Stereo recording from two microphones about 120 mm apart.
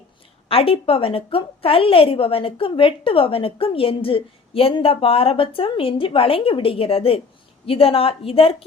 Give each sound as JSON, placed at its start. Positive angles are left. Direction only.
{"t": 0.4, "sound": "a woman's voice", "side_deg": 50}